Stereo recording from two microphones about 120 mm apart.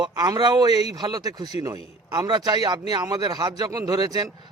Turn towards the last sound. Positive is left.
turn(degrees=-35)  # may be behind; listen again after turning